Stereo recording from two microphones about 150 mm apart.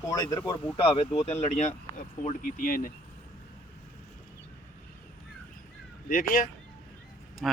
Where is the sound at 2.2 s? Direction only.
65° left (ahead or behind).